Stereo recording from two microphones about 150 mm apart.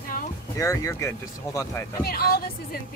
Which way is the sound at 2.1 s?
90° left.